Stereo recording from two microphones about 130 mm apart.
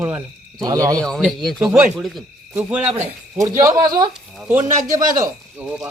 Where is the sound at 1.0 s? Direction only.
5° left (ahead or behind); by 2.0 s 10° right (ahead or behind).